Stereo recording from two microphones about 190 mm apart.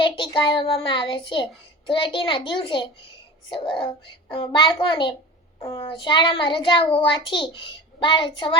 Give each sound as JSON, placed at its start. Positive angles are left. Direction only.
{"t": 0.0, "sound": "a child's voice", "side_deg": 25}